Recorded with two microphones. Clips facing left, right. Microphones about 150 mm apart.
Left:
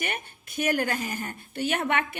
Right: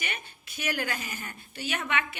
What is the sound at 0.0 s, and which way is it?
A woman's voice, 55° left (ahead or behind).